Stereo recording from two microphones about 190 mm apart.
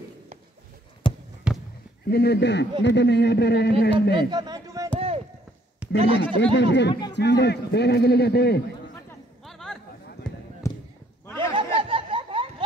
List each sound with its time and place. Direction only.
1.0 s basketball bounce: 25° left (ahead or behind)
1.5 s basketball bounce: 5° right (ahead or behind)
2.0 s a man's voice: 55° left (ahead or behind)
4.1 s a man's voice: 20° right (ahead or behind)
5.8 s a sound: 5° right (ahead or behind)
6.1 s speech: 70° left (ahead or behind)
6.9 s speech: 20° left (ahead or behind)
7.2 s a man's voice: 60° left (ahead or behind)
9.4 s chatter: centre (ahead or behind)
10.6 s basketball bounce: 15° left (ahead or behind)
11.5 s a sound: 25° right (ahead or behind)